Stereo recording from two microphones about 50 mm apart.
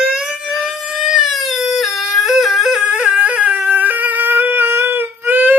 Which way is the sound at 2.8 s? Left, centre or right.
Right.